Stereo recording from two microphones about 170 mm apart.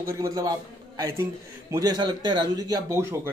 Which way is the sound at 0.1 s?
20° right (ahead or behind).